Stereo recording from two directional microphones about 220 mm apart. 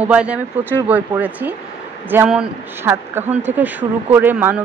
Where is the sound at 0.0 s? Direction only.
5° right (ahead or behind).